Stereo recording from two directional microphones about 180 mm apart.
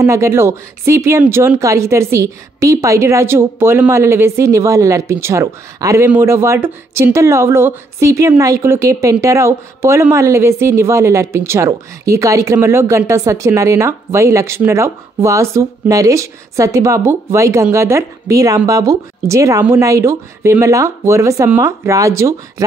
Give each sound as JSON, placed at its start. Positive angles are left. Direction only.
{"t": 0.0, "sound": "speech", "side_deg": -15}